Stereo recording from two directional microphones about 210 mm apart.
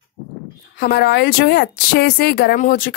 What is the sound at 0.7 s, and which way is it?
Speech, 50° left (ahead or behind).